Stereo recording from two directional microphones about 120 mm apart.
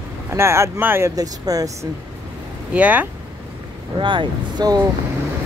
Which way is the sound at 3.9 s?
40° right (ahead or behind).